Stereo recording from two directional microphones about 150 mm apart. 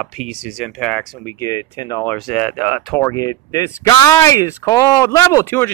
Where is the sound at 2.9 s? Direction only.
20° left (ahead or behind).